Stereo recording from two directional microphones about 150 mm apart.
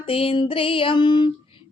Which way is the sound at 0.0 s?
40° left (ahead or behind).